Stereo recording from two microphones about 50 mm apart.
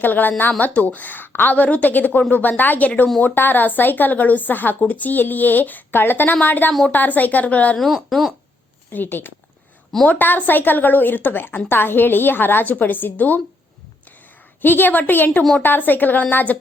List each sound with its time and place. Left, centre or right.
0.0 s a woman's voice: left
1.5 s a woman's voice: left
7.8 s speech: centre
8.9 s a woman's voice: left
14.6 s a woman's voice: left